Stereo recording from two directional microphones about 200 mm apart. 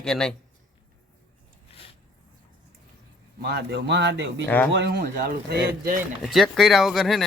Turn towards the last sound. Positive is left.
turn(degrees=0)  # may be behind; listen again after turning